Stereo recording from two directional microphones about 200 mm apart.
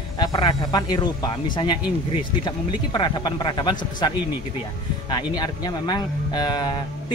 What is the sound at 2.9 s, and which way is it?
A woman's voice, 20° left (ahead or behind).